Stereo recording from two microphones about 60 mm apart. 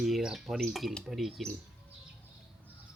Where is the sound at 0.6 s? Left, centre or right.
Centre.